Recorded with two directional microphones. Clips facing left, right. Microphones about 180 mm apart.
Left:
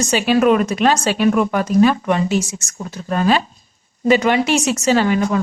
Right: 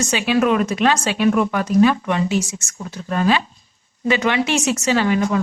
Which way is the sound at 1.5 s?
45° left (ahead or behind).